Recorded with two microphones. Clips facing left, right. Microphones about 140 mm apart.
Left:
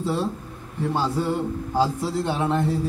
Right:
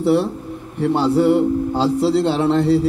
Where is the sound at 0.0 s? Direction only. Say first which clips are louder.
Right 9 dB; 75° right (ahead or behind).